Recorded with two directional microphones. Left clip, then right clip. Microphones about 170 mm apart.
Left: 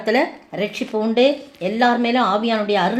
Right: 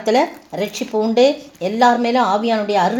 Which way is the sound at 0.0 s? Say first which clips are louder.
Right 3 dB; 30° right (ahead or behind).